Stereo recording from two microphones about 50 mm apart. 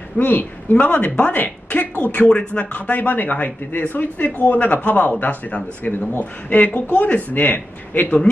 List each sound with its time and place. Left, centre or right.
0.2 s a man's voice: left
2.1 s a man's voice: left